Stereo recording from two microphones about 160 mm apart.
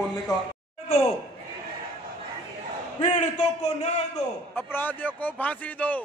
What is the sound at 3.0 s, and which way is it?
A man's voice, 50° left (ahead or behind).